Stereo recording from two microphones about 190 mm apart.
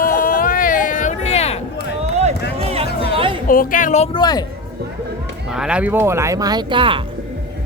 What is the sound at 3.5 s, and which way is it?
Speech, 45° left (ahead or behind).